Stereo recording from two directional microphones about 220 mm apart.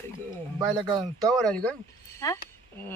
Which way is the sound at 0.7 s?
20° right (ahead or behind).